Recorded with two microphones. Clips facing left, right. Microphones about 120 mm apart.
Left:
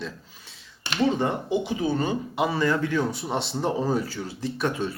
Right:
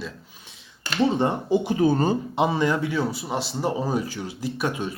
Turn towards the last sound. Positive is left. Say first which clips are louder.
# even
turn(degrees=-15)  # may be behind; listen again after turning